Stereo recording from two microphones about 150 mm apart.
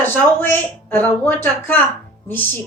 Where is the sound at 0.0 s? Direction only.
15° left (ahead or behind).